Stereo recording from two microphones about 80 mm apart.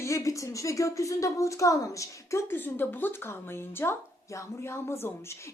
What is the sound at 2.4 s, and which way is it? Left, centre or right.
A woman's voice, left.